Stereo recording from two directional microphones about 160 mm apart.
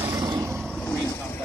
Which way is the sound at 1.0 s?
20° left (ahead or behind).